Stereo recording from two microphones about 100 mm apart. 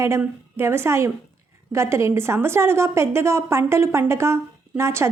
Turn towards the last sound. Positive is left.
turn(degrees=-25)  # may be behind; listen again after turning